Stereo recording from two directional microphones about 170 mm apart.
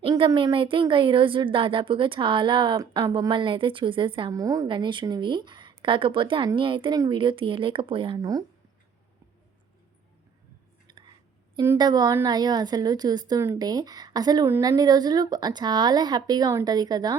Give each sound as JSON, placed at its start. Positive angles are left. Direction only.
{"t": 0.0, "sound": "a woman's voice", "side_deg": -25}
{"t": 10.8, "sound": "whispering", "side_deg": -25}
{"t": 11.6, "sound": "a woman's voice", "side_deg": -20}